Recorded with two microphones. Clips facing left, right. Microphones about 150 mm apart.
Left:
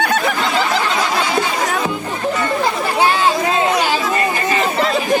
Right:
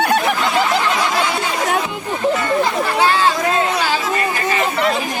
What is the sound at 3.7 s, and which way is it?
Chatter, 20° left (ahead or behind).